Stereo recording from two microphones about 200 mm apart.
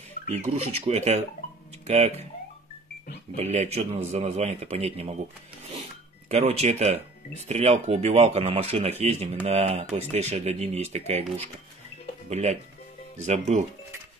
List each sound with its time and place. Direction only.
0.3 s speech: 30° right (ahead or behind)
3.3 s speech: 35° right (ahead or behind)
6.2 s speech: 35° right (ahead or behind)
12.3 s speech: 35° right (ahead or behind)